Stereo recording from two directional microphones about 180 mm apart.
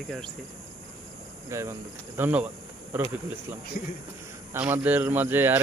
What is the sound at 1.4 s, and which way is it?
A man's voice, 15° right (ahead or behind).